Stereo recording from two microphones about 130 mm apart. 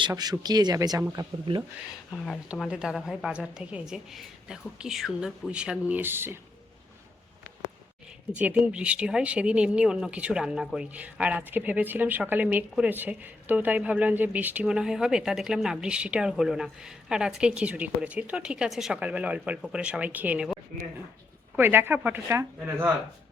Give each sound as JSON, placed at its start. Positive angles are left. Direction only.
{"t": 0.1, "sound": "speech", "side_deg": -30}
{"t": 2.1, "sound": "a woman's voice", "side_deg": 5}
{"t": 2.5, "sound": "a woman's voice", "side_deg": -5}
{"t": 8.4, "sound": "speech", "side_deg": -10}